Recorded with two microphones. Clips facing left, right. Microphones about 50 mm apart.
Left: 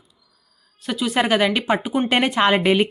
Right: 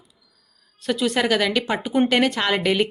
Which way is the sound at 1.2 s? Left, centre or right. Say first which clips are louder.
Left 5 dB; centre.